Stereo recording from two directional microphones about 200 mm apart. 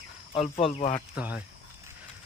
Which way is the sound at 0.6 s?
30° left (ahead or behind).